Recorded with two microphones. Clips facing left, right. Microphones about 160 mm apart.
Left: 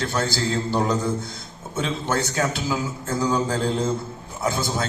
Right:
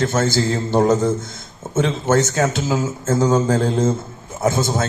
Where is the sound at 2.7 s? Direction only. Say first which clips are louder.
Right 7 dB; 45° right (ahead or behind).